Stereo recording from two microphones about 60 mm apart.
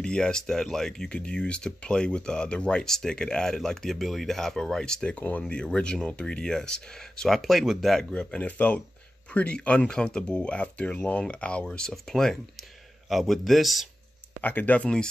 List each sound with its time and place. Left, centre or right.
0.0 s speech: centre
5.1 s speech: left
5.4 s speech: centre
7.9 s a man's voice: centre
14.4 s speech: left